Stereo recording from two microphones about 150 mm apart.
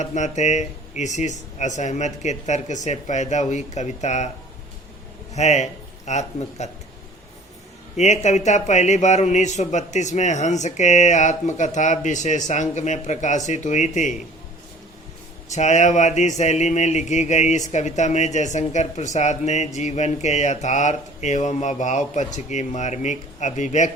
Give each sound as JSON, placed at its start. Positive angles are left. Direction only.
{"t": 0.0, "sound": "speech", "side_deg": 50}
{"t": 5.3, "sound": "speech", "side_deg": 50}
{"t": 7.9, "sound": "speech", "side_deg": 50}
{"t": 15.5, "sound": "speech", "side_deg": 50}